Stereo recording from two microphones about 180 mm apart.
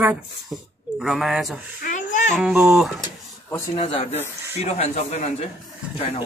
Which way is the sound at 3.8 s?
30° left (ahead or behind).